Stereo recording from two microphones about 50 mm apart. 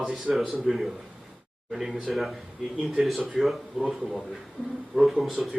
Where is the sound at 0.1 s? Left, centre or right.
Centre.